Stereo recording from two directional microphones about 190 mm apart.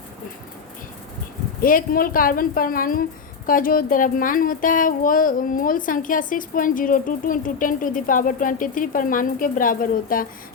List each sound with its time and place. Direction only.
1.6 s speech: 50° left (ahead or behind)